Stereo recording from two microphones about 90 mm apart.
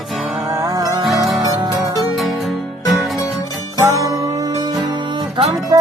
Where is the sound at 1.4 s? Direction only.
50° right (ahead or behind).